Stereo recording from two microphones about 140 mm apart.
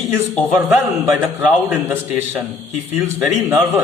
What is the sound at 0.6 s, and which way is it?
Speech, 15° right (ahead or behind).